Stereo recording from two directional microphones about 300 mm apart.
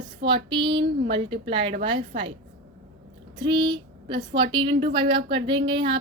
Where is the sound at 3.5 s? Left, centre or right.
Centre.